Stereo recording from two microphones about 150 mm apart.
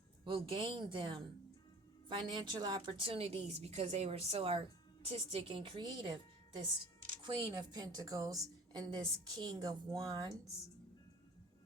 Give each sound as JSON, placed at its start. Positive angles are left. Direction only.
{"t": 0.3, "sound": "a woman's voice", "side_deg": -35}
{"t": 7.2, "sound": "a woman's voice", "side_deg": -30}